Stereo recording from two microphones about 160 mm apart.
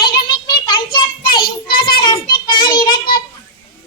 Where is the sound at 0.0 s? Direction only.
30° left (ahead or behind).